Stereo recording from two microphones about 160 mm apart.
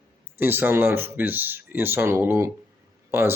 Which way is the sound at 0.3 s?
15° right (ahead or behind).